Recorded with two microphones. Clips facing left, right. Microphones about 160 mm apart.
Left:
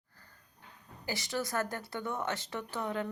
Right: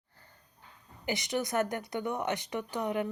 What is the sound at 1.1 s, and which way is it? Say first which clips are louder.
Speech: right 3 dB; 20° right (ahead or behind).